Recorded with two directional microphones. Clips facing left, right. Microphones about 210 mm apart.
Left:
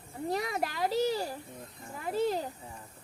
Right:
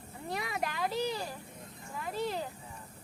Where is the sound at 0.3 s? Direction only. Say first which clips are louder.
Left 4 dB; 40° left (ahead or behind).